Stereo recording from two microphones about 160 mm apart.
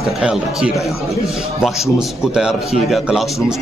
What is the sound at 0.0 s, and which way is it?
Speech, 5° right (ahead or behind).